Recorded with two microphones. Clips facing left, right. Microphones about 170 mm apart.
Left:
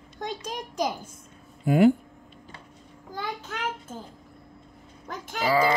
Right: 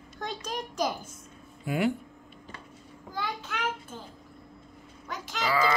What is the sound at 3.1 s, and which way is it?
Speech, 45° left (ahead or behind).